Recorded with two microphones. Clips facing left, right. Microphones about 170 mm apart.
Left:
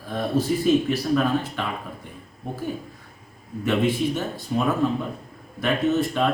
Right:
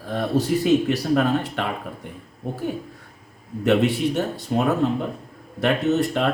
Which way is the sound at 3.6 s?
70° right (ahead or behind).